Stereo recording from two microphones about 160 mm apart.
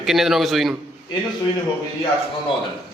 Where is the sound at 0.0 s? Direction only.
Centre (ahead or behind).